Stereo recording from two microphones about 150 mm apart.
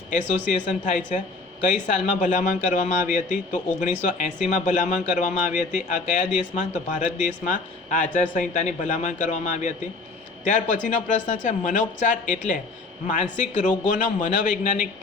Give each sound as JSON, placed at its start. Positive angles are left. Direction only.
{"t": 0.1, "sound": "a man's voice", "side_deg": 55}